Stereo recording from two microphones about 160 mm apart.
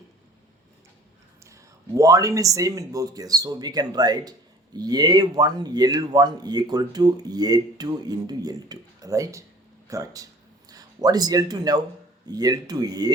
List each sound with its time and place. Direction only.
1.5 s speech: 20° right (ahead or behind)